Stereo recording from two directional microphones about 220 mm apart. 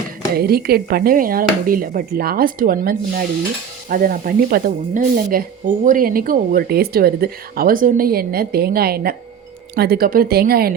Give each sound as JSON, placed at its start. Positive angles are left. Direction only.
{"t": 0.3, "sound": "speech", "side_deg": -45}